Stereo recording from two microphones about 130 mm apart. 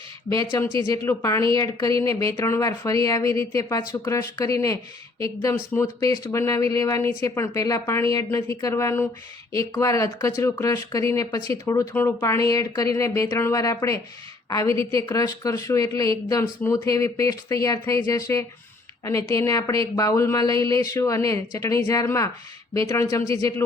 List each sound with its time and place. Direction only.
0.3 s speech: 20° left (ahead or behind)